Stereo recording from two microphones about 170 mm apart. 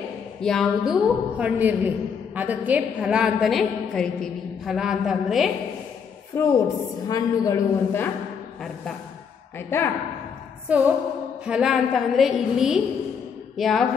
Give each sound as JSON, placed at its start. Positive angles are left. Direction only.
{"t": 0.4, "sound": "a woman's voice", "side_deg": 5}
{"t": 6.3, "sound": "a woman's voice", "side_deg": 15}
{"t": 9.6, "sound": "a woman's voice", "side_deg": 15}
{"t": 10.7, "sound": "music", "side_deg": -10}
{"t": 11.4, "sound": "a woman's voice", "side_deg": -5}